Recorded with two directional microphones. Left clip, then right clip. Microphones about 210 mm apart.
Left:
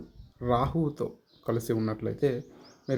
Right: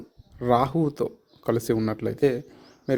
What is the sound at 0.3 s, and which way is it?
Speech, 40° right (ahead or behind).